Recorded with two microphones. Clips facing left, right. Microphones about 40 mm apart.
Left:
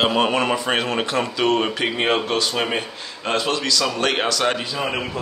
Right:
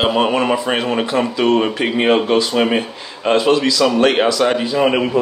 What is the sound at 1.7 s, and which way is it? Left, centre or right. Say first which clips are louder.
A man's voice: right 5 dB; right.